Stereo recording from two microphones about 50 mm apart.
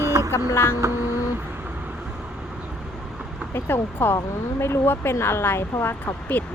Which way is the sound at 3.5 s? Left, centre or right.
Left.